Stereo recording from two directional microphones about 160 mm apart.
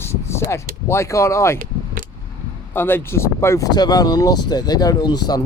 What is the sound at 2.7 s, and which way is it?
Speech, 15° left (ahead or behind).